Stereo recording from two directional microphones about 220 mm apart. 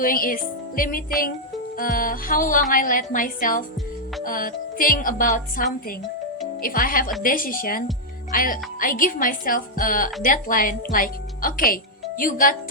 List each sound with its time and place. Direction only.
0.0 s speech: 40° left (ahead or behind)